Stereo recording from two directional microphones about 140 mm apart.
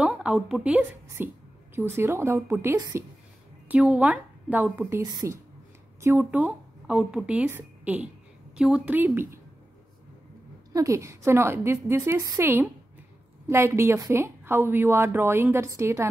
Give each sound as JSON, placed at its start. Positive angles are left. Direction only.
{"t": 0.0, "sound": "a woman's voice", "side_deg": -5}
{"t": 3.6, "sound": "a woman's voice", "side_deg": -10}
{"t": 10.7, "sound": "a woman's voice", "side_deg": -25}